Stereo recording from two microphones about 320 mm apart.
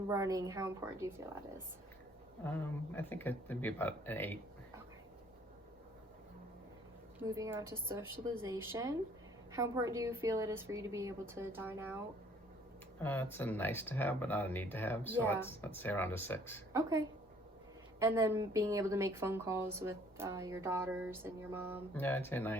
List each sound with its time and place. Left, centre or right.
0.1 s a woman's voice: centre
2.9 s speech: centre
7.2 s a woman's voice: centre
13.0 s speech: centre
16.7 s a woman's voice: centre
21.9 s speech: centre